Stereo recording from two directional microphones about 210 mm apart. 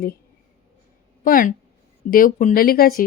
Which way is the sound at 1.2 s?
40° left (ahead or behind).